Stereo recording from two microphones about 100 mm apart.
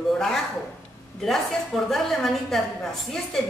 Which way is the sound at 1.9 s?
Centre (ahead or behind).